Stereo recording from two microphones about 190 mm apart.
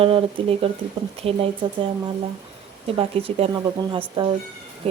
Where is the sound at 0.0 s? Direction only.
30° right (ahead or behind).